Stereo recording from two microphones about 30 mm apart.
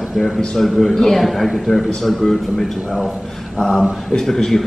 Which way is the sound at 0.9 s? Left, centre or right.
Centre.